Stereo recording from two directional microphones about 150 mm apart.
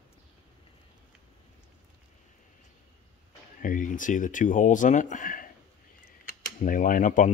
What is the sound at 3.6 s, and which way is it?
Speech, 60° left (ahead or behind).